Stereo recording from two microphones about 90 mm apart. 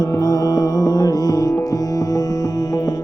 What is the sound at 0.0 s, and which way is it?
Music, 40° left (ahead or behind).